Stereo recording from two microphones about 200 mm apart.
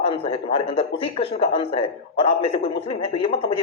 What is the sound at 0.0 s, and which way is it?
Speech, 30° left (ahead or behind).